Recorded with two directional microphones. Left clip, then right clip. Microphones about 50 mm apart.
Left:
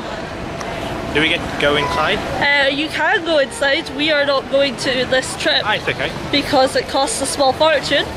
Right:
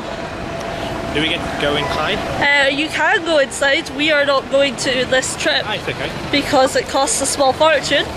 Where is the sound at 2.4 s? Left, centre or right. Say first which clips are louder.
Right 1 dB; centre.